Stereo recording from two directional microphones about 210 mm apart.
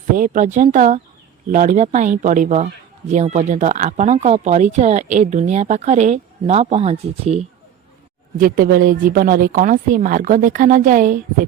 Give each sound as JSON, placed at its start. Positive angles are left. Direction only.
{"t": 0.2, "sound": "speech", "side_deg": -35}
{"t": 8.4, "sound": "speech", "side_deg": -40}